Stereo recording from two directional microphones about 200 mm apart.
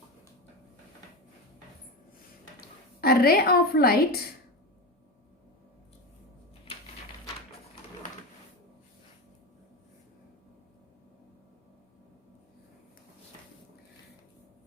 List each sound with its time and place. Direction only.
2.6 s a woman's voice: 50° left (ahead or behind)